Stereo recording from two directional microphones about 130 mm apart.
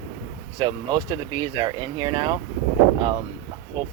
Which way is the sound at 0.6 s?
35° right (ahead or behind).